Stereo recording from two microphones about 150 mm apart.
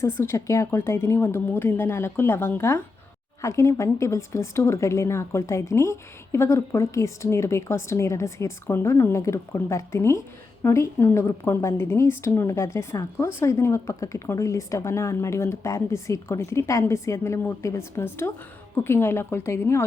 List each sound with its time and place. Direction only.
0.0 s a woman's voice: 15° left (ahead or behind)